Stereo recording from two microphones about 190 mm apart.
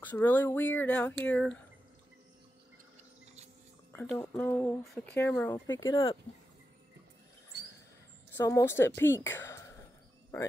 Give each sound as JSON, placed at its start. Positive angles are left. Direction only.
{"t": 0.0, "sound": "speech", "side_deg": 10}
{"t": 3.9, "sound": "speech", "side_deg": 10}
{"t": 5.9, "sound": "speech", "side_deg": 25}
{"t": 8.4, "sound": "speech", "side_deg": 15}